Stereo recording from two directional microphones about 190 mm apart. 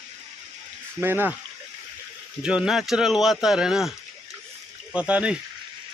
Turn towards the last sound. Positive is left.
turn(degrees=-5)  # may be behind; listen again after turning